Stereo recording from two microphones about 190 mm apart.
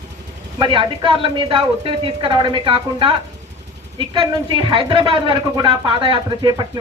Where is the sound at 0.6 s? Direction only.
25° right (ahead or behind).